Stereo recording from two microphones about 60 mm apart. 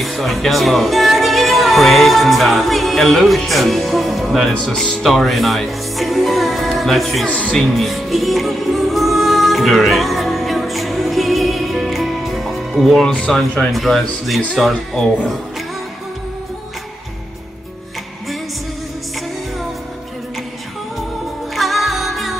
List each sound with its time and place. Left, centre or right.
0.0 s speech: centre
7.2 s music: left
7.5 s music: centre
13.0 s speech: centre
21.5 s music: centre